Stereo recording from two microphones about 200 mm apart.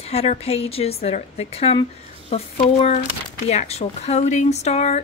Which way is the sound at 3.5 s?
30° left (ahead or behind).